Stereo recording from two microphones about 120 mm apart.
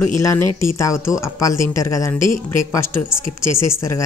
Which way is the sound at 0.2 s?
25° left (ahead or behind).